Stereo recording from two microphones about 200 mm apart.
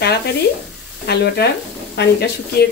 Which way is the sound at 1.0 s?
55° left (ahead or behind).